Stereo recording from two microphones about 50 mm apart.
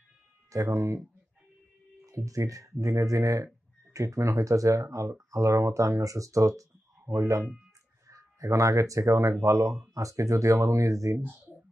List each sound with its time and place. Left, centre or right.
0.5 s speech: right
2.0 s speech: right